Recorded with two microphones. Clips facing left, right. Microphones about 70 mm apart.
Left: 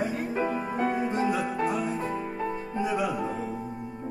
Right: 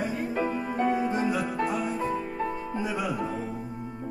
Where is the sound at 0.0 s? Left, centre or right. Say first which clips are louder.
Even; centre.